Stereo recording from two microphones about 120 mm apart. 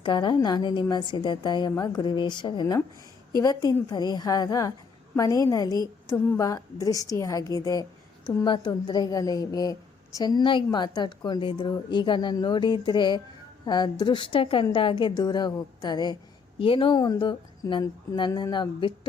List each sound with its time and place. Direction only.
0.0 s a woman's voice: 40° left (ahead or behind)
16.6 s a woman's voice: 45° left (ahead or behind)